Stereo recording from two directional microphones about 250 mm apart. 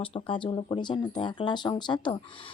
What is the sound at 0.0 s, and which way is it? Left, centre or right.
A woman's voice, left.